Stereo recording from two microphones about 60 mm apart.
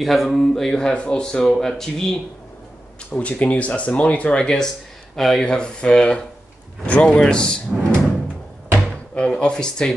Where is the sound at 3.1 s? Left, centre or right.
Left.